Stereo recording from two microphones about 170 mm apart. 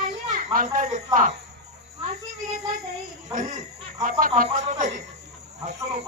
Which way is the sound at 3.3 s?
45° right (ahead or behind).